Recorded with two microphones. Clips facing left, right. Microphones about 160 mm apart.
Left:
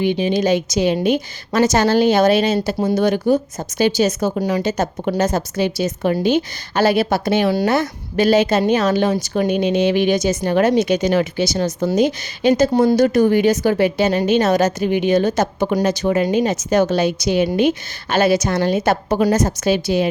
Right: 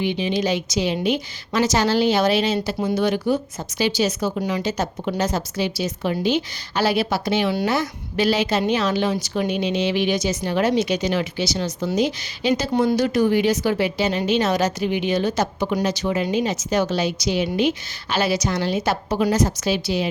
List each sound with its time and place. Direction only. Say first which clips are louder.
0.0 s a woman's voice: left 5 dB; 45° left (ahead or behind)